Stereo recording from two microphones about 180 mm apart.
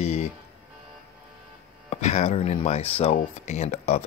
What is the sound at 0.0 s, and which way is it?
Music, 40° left (ahead or behind).